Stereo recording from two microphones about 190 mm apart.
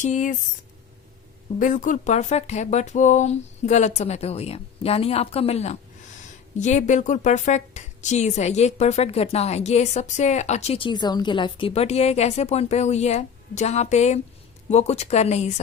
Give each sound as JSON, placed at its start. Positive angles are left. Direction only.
{"t": 0.0, "sound": "a woman's voice", "side_deg": 40}
{"t": 1.5, "sound": "a woman's voice", "side_deg": 45}